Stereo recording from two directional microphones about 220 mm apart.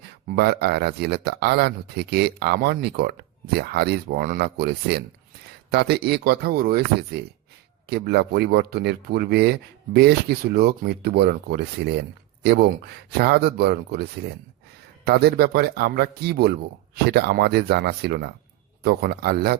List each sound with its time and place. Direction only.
0.3 s speech: 45° right (ahead or behind)